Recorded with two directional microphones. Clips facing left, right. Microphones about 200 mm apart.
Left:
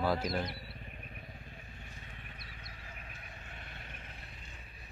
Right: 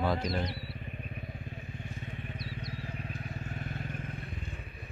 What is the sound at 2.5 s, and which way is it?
Vehicle, 30° right (ahead or behind).